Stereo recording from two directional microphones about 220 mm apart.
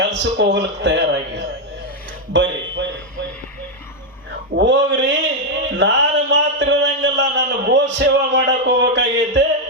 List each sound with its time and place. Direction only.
0.0 s a man's voice: 50° right (ahead or behind)
4.5 s speech: 55° right (ahead or behind)
5.7 s a sound: 55° right (ahead or behind)